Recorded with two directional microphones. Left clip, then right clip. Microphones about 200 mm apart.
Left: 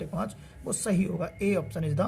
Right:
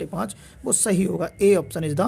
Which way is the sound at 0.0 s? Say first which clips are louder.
Right 5 dB; 50° right (ahead or behind).